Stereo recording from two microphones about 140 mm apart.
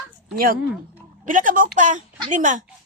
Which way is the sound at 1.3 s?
70° right (ahead or behind).